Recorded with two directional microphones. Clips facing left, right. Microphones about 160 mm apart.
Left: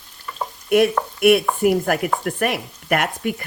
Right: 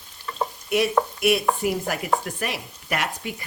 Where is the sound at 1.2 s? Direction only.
55° left (ahead or behind).